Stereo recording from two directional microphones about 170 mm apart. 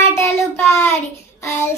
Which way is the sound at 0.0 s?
15° left (ahead or behind).